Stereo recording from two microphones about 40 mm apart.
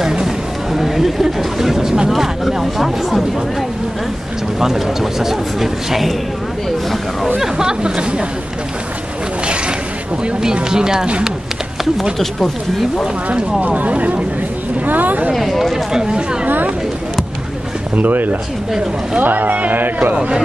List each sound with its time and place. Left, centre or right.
0.0 s a sound: centre
0.7 s speech: centre
4.6 s a man's voice: centre
7.3 s speech: centre
10.4 s a man's voice: centre
12.2 s speech: centre
13.6 s speech: right
14.9 s speech: right
15.3 s speech: centre
15.7 s a man's voice: centre
17.9 s speech: right